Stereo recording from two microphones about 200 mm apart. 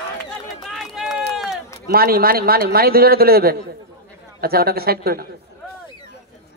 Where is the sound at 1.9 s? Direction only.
50° right (ahead or behind).